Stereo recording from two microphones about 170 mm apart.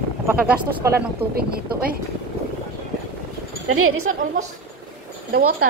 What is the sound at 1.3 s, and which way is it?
Speech, 65° right (ahead or behind).